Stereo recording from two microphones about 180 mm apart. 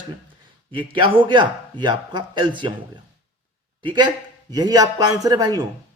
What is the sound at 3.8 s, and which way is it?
Speech, 25° right (ahead or behind).